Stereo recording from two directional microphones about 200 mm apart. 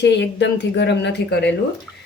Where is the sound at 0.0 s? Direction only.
60° left (ahead or behind).